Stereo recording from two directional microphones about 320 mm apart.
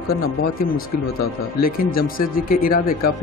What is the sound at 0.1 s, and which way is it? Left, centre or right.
Speech, left.